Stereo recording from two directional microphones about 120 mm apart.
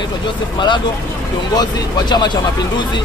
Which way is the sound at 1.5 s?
35° left (ahead or behind).